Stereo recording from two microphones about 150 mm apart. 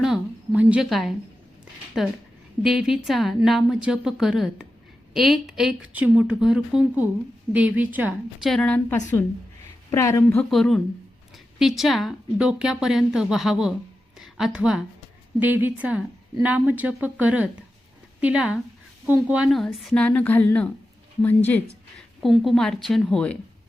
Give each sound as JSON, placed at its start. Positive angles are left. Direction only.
{"t": 0.0, "sound": "a woman's voice", "side_deg": -5}
{"t": 8.4, "sound": "a woman's voice", "side_deg": 5}
{"t": 9.9, "sound": "speech", "side_deg": 20}
{"t": 10.2, "sound": "a woman's voice", "side_deg": 5}
{"t": 19.5, "sound": "a woman's voice", "side_deg": 0}